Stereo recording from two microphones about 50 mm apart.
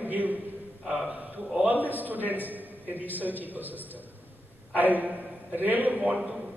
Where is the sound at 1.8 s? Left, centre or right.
Right.